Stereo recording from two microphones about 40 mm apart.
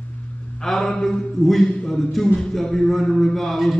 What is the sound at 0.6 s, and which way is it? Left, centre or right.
A man's voice, centre.